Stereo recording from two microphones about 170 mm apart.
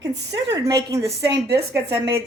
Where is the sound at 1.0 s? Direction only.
75° right (ahead or behind).